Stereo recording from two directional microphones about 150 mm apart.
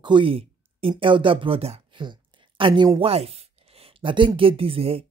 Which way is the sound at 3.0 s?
40° right (ahead or behind).